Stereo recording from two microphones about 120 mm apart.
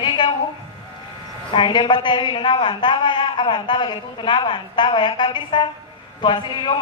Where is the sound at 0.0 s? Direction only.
35° left (ahead or behind).